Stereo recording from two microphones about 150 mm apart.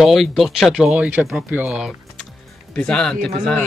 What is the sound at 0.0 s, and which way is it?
Speech, centre (ahead or behind).